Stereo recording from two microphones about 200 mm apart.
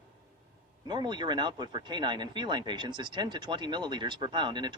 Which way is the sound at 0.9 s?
20° right (ahead or behind).